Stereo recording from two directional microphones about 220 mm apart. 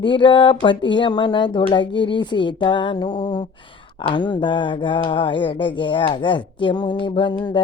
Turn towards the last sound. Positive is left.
turn(degrees=20)  # may be behind; listen again after turning